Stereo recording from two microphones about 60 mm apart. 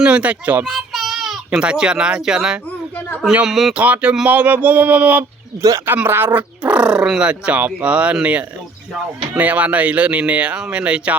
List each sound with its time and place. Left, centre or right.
0.0 s speech: right
0.6 s child singing: centre
1.5 s speech: centre
3.8 s speech: right
5.8 s speech: right
6.6 s speech: centre